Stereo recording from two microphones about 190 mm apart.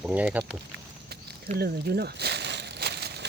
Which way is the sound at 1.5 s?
55° right (ahead or behind).